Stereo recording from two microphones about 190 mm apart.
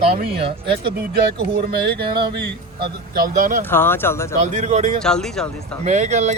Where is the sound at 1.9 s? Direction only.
60° right (ahead or behind).